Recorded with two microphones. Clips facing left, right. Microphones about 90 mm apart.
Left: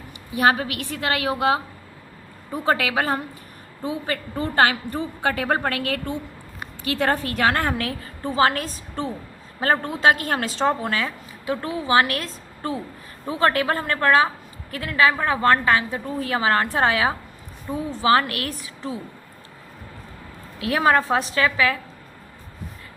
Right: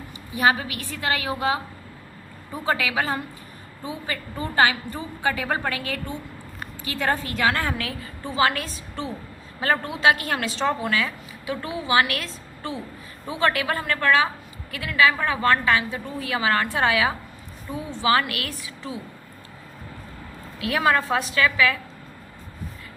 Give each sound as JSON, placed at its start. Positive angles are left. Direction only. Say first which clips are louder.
{"t": 0.3, "sound": "a woman's voice", "louder": "left 2 dB", "side_deg": 50}
{"t": 2.6, "sound": "a woman's voice", "louder": "left 3 dB", "side_deg": 50}
{"t": 20.7, "sound": "a woman's voice", "louder": "left 2 dB", "side_deg": 30}